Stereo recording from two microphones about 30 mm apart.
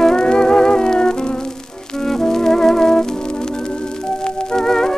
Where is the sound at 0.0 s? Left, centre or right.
Left.